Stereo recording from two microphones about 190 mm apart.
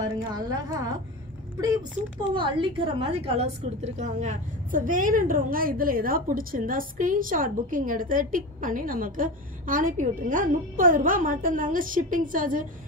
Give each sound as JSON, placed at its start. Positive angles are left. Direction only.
{"t": 0.0, "sound": "a woman's voice", "side_deg": -20}
{"t": 2.3, "sound": "a woman's voice", "side_deg": -25}